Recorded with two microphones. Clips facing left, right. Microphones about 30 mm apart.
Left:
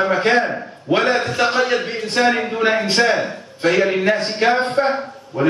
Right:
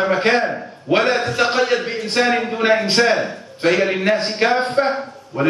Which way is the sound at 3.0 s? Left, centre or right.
Centre.